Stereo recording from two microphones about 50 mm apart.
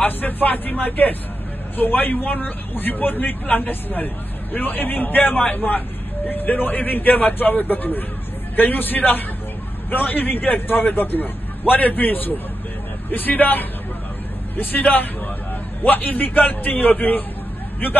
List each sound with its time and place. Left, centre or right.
0.0 s a man's voice: left